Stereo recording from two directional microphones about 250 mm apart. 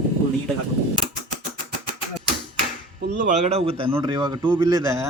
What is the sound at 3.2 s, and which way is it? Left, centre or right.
Speech, right.